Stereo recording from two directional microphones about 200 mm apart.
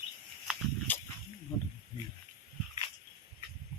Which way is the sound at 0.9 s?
10° left (ahead or behind).